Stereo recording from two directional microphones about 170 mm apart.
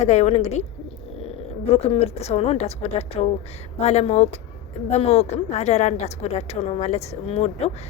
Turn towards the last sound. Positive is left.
turn(degrees=40)  # may be behind; listen again after turning